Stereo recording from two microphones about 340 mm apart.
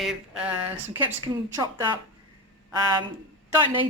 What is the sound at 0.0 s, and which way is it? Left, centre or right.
Speech, centre.